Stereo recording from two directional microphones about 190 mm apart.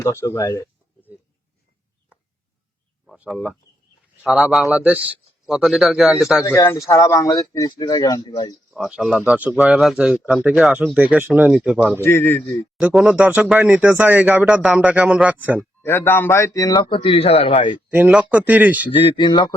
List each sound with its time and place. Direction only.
0.0 s speech: 15° left (ahead or behind)
3.1 s speech: centre (ahead or behind)
6.6 s a man's voice: 15° left (ahead or behind)
8.7 s speech: 5° right (ahead or behind)
12.0 s speech: 10° left (ahead or behind)
12.7 s speech: 5° right (ahead or behind)
15.8 s a man's voice: 10° left (ahead or behind); by 17.7 s 25° left (ahead or behind)
17.9 s speech: 10° right (ahead or behind)
19.0 s a man's voice: 25° left (ahead or behind)